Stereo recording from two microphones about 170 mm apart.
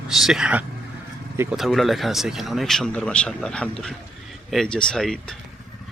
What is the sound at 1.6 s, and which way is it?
Speech, centre (ahead or behind).